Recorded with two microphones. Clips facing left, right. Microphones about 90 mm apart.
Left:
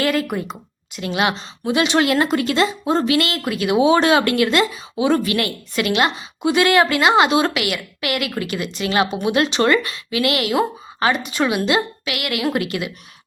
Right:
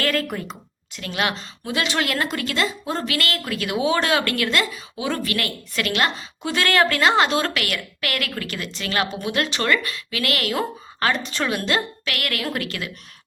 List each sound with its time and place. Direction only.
0.0 s a woman's voice: 15° left (ahead or behind)